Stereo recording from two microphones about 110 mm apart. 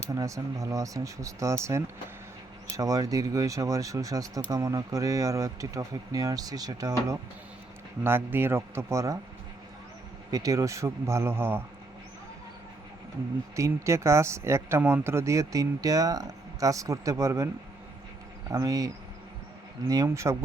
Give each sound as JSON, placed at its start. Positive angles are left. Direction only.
{"t": 0.1, "sound": "speech", "side_deg": -30}
{"t": 8.0, "sound": "speech", "side_deg": -20}
{"t": 10.3, "sound": "speech", "side_deg": -30}
{"t": 13.6, "sound": "speech", "side_deg": -25}
{"t": 18.5, "sound": "speech", "side_deg": -35}
{"t": 20.1, "sound": "speech", "side_deg": -30}